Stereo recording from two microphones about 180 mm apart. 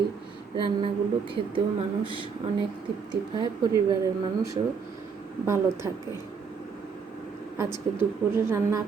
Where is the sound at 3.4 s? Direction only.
25° right (ahead or behind).